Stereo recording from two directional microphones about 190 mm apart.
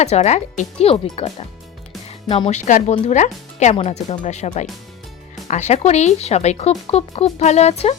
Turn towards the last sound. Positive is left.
turn(degrees=35)  # may be behind; listen again after turning